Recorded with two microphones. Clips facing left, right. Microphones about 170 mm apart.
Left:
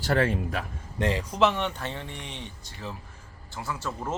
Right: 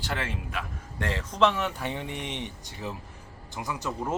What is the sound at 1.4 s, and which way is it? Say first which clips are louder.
Speech: even; centre (ahead or behind).